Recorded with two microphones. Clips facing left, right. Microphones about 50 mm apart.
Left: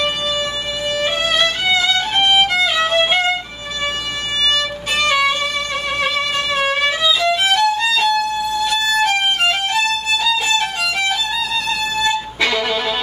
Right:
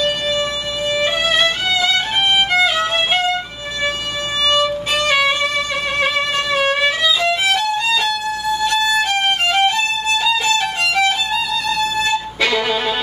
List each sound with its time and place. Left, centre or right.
2.9 s violin: centre
4.5 s violin: centre
5.9 s music: centre
10.1 s violin: centre
12.4 s music: centre